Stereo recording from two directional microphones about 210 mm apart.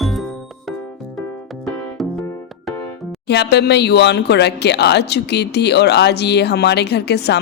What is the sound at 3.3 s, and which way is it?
Speech, 55° left (ahead or behind).